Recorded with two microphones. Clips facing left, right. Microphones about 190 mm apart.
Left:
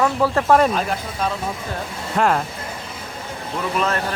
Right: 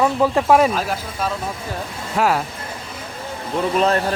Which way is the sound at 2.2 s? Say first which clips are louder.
Even; 5° right (ahead or behind).